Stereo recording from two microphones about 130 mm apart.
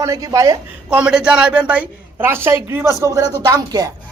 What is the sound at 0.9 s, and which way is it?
A woman's voice, 10° right (ahead or behind).